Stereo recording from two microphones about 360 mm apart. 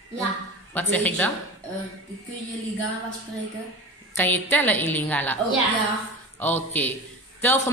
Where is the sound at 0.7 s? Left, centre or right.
Centre.